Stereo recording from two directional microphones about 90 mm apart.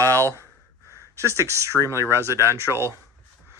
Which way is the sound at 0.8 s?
35° left (ahead or behind).